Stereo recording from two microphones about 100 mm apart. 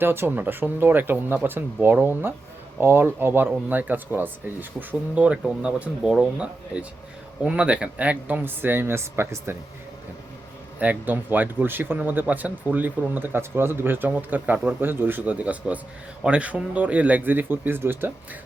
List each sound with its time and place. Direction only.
0.0 s a man's voice: 20° right (ahead or behind)
10.8 s speech: 15° right (ahead or behind)